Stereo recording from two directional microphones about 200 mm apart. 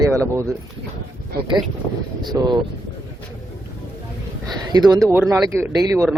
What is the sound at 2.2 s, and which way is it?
Speech, 20° right (ahead or behind).